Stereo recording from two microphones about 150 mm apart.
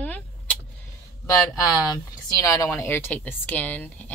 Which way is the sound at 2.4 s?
20° left (ahead or behind).